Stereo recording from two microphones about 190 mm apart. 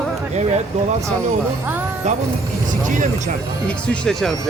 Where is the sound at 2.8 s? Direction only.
45° right (ahead or behind).